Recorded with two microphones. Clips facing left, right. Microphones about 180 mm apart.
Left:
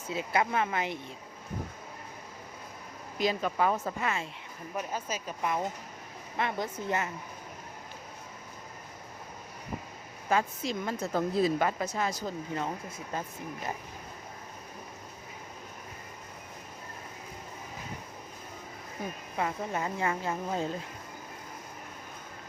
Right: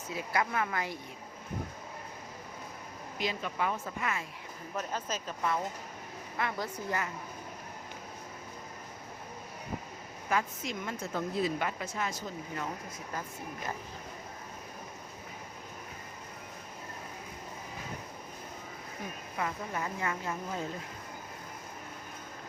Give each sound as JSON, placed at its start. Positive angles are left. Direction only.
{"t": 0.1, "sound": "speech", "side_deg": 25}
{"t": 3.2, "sound": "speech", "side_deg": 40}
{"t": 4.0, "sound": "speech", "side_deg": 25}
{"t": 4.7, "sound": "speech", "side_deg": 10}
{"t": 10.2, "sound": "speech", "side_deg": 30}
{"t": 19.4, "sound": "speech", "side_deg": 30}